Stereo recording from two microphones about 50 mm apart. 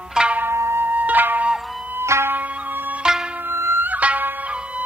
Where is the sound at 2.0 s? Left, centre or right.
Right.